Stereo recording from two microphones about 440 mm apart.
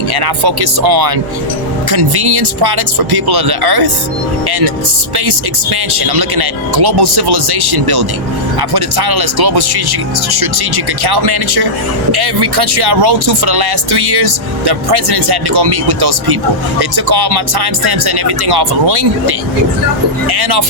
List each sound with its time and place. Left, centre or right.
0.1 s speech: right
6.0 s speech: right
11.0 s speech: right
20.2 s speech: right